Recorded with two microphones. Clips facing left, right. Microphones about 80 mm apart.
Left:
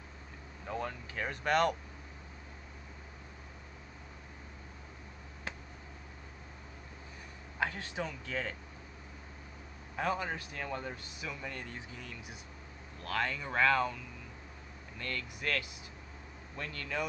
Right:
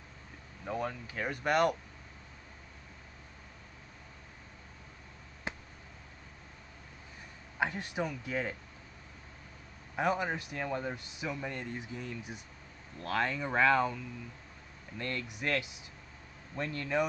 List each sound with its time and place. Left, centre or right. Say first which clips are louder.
0.7 s speech: right 2 dB; centre
7.5 s speech: right 2 dB; centre
9.9 s speech: right 3 dB; centre
15.0 s speech: right 3 dB; right